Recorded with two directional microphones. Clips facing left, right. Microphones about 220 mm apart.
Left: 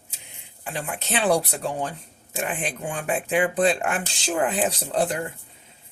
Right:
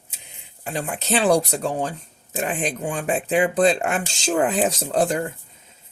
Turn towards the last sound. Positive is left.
turn(degrees=-45)  # may be behind; listen again after turning